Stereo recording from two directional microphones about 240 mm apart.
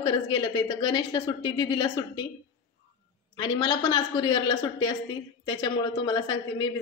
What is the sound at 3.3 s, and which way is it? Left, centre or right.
A woman's voice, centre.